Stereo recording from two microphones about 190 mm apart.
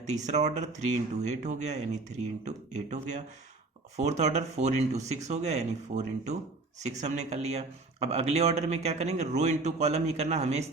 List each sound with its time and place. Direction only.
0.1 s speech: 40° right (ahead or behind)